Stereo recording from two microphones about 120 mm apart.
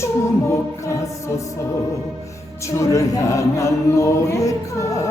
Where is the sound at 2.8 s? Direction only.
25° left (ahead or behind).